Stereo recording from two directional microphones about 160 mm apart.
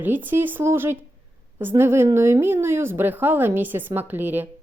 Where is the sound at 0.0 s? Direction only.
10° right (ahead or behind).